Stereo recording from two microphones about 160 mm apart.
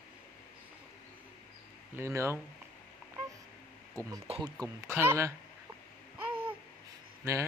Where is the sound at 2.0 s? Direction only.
15° right (ahead or behind).